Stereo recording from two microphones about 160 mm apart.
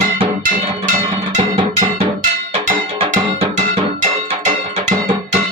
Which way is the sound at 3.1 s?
50° right (ahead or behind).